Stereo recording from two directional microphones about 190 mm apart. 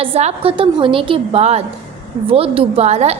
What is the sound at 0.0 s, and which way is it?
A woman's voice, 30° right (ahead or behind).